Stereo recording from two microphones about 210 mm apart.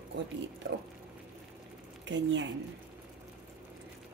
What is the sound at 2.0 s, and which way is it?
Speech, 60° right (ahead or behind).